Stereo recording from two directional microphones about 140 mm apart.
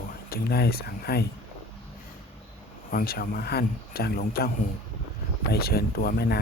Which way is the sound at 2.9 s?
90° left.